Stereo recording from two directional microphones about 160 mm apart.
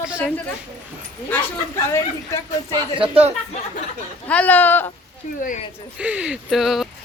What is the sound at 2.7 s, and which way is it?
Speech, 35° right (ahead or behind).